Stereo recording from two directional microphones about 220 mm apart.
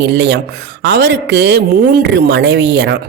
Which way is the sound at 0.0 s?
50° right (ahead or behind).